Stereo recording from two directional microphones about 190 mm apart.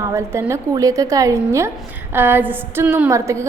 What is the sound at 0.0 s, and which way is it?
A woman's voice, 15° right (ahead or behind).